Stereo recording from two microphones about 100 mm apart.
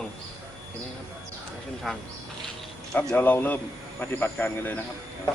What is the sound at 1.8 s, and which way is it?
Speech, centre (ahead or behind).